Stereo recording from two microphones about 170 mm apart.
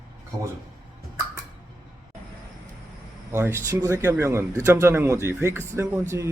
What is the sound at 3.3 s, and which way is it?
Speech, 15° right (ahead or behind).